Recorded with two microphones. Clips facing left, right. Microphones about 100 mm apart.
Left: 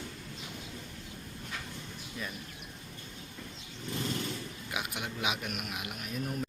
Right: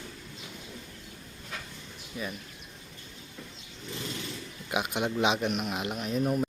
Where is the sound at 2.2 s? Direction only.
10° right (ahead or behind).